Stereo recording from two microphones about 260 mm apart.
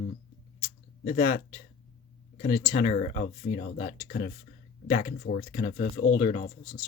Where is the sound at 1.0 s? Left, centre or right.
Left.